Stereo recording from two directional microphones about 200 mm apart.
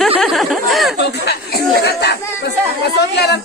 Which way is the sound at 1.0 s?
55° left (ahead or behind).